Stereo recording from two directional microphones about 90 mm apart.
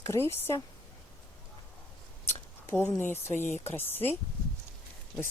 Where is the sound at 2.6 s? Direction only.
30° left (ahead or behind).